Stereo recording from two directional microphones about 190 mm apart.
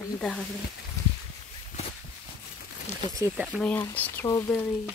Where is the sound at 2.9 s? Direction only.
35° left (ahead or behind).